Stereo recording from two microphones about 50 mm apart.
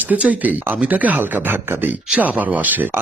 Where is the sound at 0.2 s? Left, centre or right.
Right.